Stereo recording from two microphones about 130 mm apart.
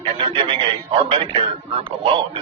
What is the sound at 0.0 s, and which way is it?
Speech, 40° right (ahead or behind).